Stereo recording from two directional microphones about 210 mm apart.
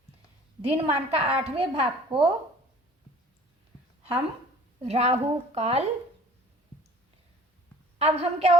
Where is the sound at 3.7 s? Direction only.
20° left (ahead or behind).